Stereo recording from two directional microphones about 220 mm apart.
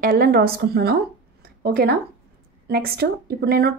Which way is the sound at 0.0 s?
40° right (ahead or behind).